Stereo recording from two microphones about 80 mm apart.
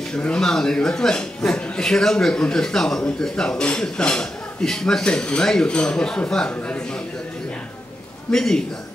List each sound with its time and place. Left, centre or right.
0.1 s a man's voice: centre
8.3 s a man's voice: centre